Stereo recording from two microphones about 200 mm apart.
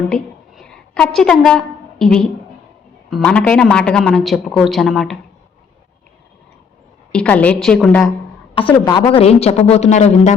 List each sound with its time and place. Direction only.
0.1 s a sound: 5° left (ahead or behind)
3.1 s a man's voice: 5° left (ahead or behind)
7.1 s a man's voice: 5° left (ahead or behind)
8.6 s a woman's voice: 25° left (ahead or behind)